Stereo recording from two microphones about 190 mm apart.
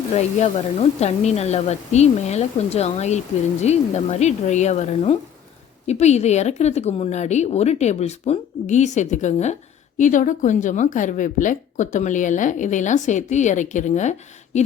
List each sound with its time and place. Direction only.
0.1 s speech: 35° left (ahead or behind)